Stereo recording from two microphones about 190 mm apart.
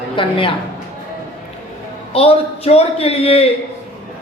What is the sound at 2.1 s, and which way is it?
A man's voice, 30° left (ahead or behind).